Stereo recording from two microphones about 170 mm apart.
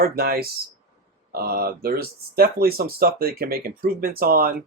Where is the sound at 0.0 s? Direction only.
65° right (ahead or behind).